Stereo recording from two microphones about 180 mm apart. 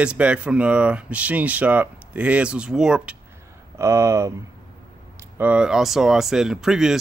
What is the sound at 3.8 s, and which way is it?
Speech, 15° right (ahead or behind).